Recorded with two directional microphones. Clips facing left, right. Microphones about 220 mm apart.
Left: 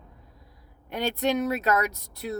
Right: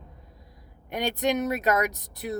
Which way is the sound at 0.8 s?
15° right (ahead or behind).